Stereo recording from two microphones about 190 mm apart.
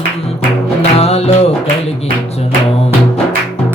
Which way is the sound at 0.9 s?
35° left (ahead or behind).